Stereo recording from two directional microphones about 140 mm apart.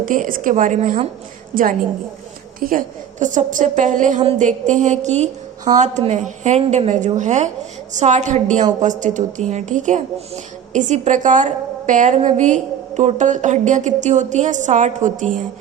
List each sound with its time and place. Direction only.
0.0 s a woman's voice: 70° right (ahead or behind)
2.6 s a woman's voice: 85° right; by 15.4 s 70° right (ahead or behind)